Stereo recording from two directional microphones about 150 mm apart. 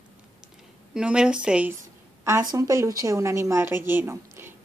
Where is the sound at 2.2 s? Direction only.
25° right (ahead or behind).